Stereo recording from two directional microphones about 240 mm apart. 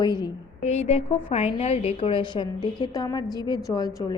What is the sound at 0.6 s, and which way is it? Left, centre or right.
A woman's voice, left.